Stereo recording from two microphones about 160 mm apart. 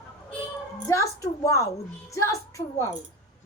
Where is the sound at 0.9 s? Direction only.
20° left (ahead or behind).